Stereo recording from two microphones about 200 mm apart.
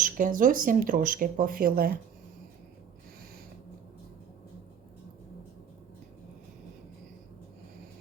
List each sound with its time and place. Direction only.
0.0 s speech: 40° right (ahead or behind)